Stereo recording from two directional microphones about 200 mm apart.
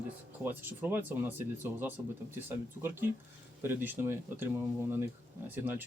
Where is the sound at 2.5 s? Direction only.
10° right (ahead or behind).